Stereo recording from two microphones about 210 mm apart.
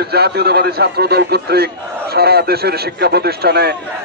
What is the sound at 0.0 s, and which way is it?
A man's voice, 50° right (ahead or behind).